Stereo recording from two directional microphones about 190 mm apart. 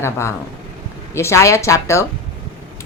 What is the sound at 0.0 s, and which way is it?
Speech, 15° left (ahead or behind).